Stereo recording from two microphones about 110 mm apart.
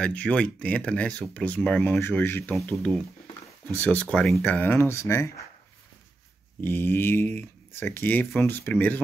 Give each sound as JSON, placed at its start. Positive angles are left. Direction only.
{"t": 0.0, "sound": "speech", "side_deg": 10}
{"t": 3.7, "sound": "speech", "side_deg": 15}
{"t": 6.6, "sound": "speech", "side_deg": 20}